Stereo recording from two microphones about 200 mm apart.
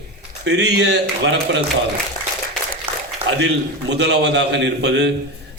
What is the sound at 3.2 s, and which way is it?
A man's voice, 60° right (ahead or behind).